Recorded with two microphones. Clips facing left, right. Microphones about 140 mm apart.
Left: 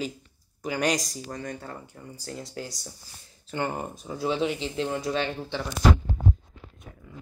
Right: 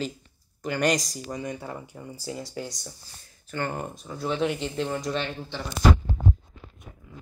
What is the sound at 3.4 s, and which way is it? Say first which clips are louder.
Speech: left 1 dB; 20° left (ahead or behind).